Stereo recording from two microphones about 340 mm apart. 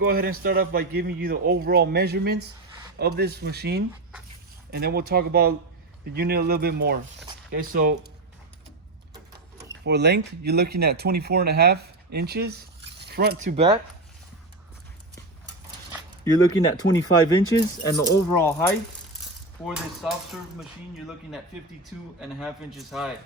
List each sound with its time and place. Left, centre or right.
0.0 s speech: right
9.8 s speech: right
16.9 s speech: centre
19.6 s a man's voice: centre
22.2 s a man's voice: centre